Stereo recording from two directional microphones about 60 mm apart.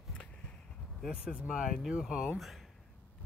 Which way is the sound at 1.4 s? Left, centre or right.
Centre.